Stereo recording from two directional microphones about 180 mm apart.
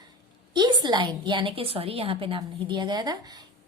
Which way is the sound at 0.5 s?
25° right (ahead or behind).